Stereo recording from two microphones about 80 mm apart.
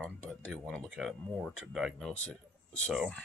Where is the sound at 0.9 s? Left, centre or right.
Centre.